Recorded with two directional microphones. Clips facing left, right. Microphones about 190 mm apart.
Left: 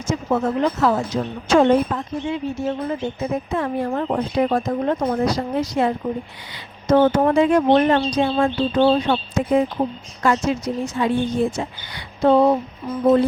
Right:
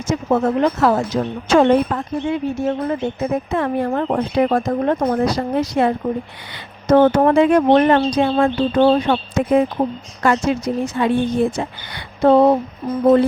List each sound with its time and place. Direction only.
0.3 s a woman's voice: 50° right (ahead or behind)